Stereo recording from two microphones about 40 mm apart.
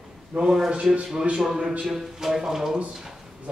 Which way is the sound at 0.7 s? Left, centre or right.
Right.